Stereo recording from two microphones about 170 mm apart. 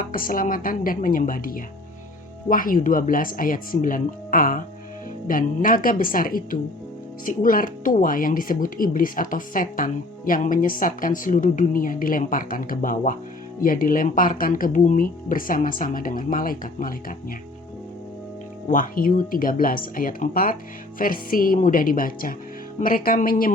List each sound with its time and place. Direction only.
0.0 s speech: 55° left (ahead or behind)
18.7 s speech: 55° left (ahead or behind)